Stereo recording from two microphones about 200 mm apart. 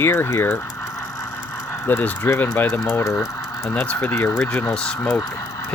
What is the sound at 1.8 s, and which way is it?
Speech, 10° left (ahead or behind).